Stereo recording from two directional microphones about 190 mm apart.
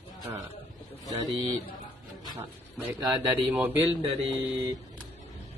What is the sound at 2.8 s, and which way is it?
A man's voice, 10° right (ahead or behind).